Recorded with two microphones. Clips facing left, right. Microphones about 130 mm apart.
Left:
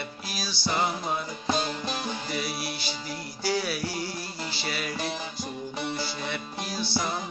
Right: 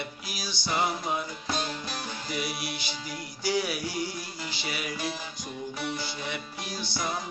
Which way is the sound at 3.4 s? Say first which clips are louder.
Even; 15° right (ahead or behind).